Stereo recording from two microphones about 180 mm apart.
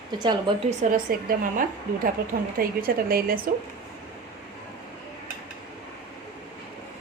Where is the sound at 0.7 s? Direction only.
50° right (ahead or behind).